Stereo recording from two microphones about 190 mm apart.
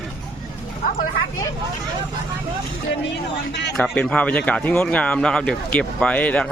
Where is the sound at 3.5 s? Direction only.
65° left (ahead or behind).